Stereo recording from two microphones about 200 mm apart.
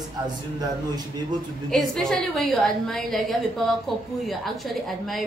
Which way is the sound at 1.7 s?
Centre (ahead or behind).